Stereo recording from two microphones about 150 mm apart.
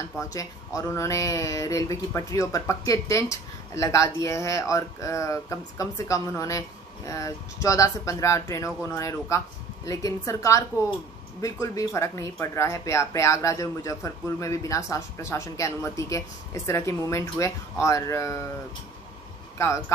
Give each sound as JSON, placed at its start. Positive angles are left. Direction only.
{"t": 0.2, "sound": "speech", "side_deg": 20}